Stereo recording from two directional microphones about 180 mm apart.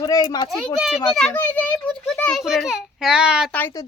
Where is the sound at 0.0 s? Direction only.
20° left (ahead or behind).